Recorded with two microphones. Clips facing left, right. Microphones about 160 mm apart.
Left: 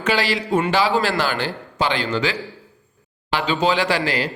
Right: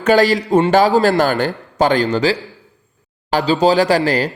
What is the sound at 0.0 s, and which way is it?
A man's voice, 45° right (ahead or behind).